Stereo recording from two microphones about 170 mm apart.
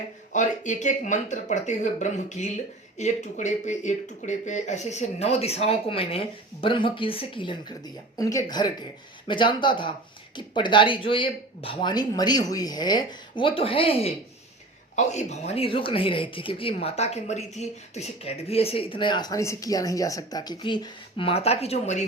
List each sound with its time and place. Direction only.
0.3 s speech: 45° left (ahead or behind)
8.1 s speech: 20° left (ahead or behind); by 22.0 s 40° left (ahead or behind)